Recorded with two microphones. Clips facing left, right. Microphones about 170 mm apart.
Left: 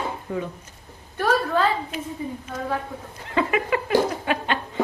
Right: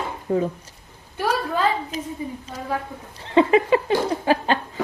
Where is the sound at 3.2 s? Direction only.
30° right (ahead or behind).